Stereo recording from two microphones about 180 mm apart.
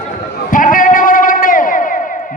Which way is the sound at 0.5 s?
50° left (ahead or behind).